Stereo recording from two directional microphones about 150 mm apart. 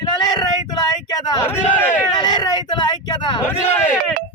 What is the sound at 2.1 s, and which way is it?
Speech, 30° left (ahead or behind).